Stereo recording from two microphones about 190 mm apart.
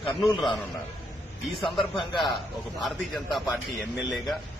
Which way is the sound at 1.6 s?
Centre (ahead or behind).